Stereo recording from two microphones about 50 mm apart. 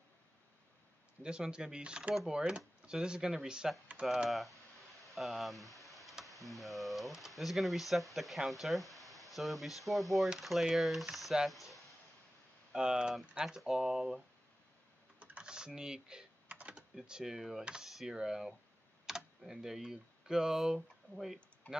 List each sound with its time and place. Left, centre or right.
1.2 s speech: centre
12.7 s speech: centre
15.1 s computer keyboard: right
15.4 s speech: centre
16.4 s typing: right
16.9 s speech: centre